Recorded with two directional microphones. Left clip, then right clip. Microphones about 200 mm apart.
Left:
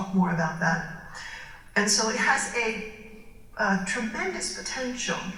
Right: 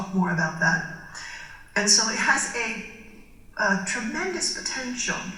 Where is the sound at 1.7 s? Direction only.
25° right (ahead or behind).